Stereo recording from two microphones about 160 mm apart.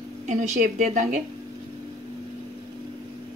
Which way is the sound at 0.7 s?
50° right (ahead or behind).